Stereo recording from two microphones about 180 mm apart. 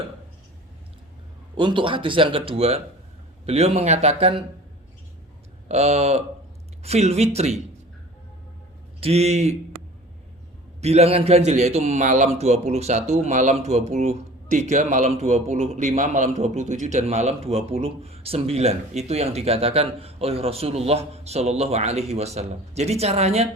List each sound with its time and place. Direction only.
1.5 s a man's voice: 25° right (ahead or behind)
5.6 s a man's voice: 35° right (ahead or behind)
9.0 s a man's voice: 35° right (ahead or behind)
10.8 s a man's voice: 35° right (ahead or behind)